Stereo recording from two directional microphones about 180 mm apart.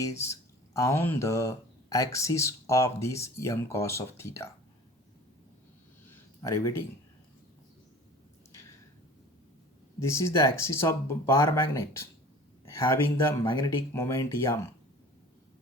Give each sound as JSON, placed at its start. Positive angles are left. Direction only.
{"t": 0.0, "sound": "speech", "side_deg": 15}
{"t": 6.1, "sound": "a sound", "side_deg": 20}
{"t": 10.0, "sound": "speech", "side_deg": 15}